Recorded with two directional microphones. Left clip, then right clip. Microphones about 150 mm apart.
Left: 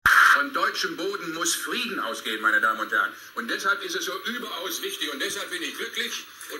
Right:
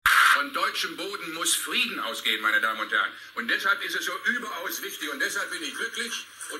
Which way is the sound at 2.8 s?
25° left (ahead or behind).